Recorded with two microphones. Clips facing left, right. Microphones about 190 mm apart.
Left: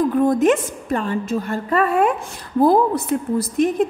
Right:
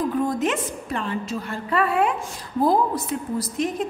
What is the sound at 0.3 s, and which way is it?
A woman's voice, 50° left (ahead or behind).